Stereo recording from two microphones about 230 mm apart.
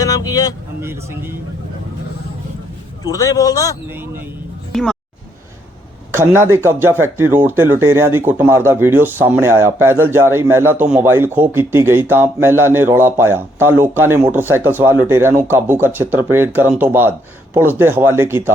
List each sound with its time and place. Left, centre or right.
0.0 s speech: centre
0.8 s speech: centre
3.0 s speech: centre
3.8 s speech: centre
4.7 s music: centre
6.1 s speech: centre